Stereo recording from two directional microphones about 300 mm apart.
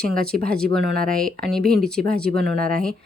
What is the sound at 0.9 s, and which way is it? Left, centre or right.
Speech, right.